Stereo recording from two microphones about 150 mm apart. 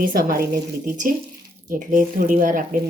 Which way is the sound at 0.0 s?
75° right (ahead or behind).